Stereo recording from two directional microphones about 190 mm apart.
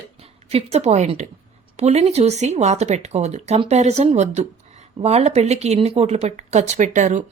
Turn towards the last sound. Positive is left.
turn(degrees=-40)  # may be behind; listen again after turning